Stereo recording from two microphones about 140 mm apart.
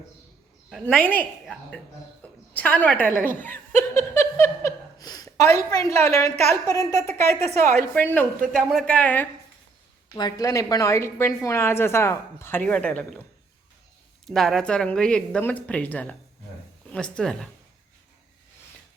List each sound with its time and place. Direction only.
0.7 s speech: 5° left (ahead or behind)
10.2 s speech: 30° left (ahead or behind); by 13.2 s 10° left (ahead or behind)
14.3 s a woman's voice: centre (ahead or behind)